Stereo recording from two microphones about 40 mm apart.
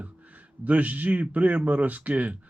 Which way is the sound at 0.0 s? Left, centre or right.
Right.